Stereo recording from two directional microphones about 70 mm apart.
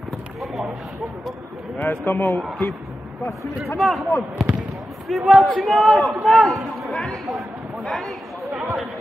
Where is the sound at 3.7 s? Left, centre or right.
Centre.